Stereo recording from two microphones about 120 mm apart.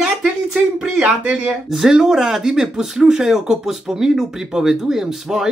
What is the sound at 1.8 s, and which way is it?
Speech, 5° right (ahead or behind).